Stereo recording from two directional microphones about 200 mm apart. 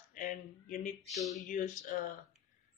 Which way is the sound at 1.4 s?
40° left (ahead or behind).